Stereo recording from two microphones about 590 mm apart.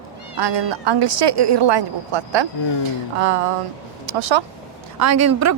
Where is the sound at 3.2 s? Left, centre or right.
Right.